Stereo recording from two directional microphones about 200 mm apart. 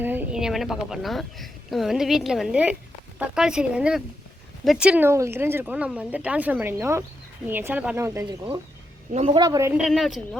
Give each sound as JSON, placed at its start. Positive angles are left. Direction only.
{"t": 0.0, "sound": "a woman's voice", "side_deg": -10}
{"t": 9.8, "sound": "a woman's voice", "side_deg": 0}